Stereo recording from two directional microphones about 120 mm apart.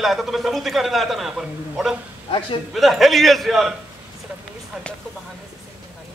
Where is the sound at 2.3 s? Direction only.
45° left (ahead or behind).